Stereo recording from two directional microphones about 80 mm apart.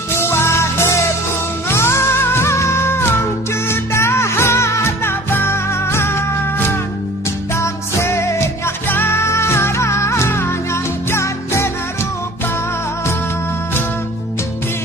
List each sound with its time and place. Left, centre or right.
0.1 s music: left